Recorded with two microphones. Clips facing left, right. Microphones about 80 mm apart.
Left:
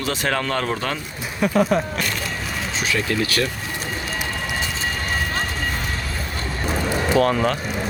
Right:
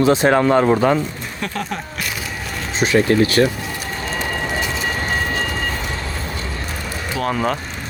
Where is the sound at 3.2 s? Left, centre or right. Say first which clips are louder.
Right 8 dB; right.